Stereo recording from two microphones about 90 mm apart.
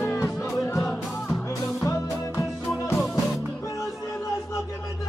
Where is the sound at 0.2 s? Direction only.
35° left (ahead or behind).